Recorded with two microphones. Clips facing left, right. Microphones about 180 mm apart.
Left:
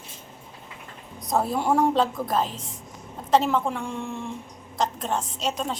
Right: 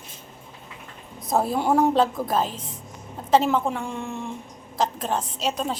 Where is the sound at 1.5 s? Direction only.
Centre (ahead or behind).